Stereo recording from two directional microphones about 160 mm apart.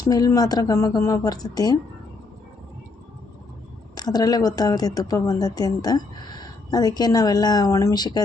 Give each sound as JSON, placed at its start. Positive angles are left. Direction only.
{"t": 0.0, "sound": "a woman's voice", "side_deg": 25}
{"t": 3.9, "sound": "a woman's voice", "side_deg": 25}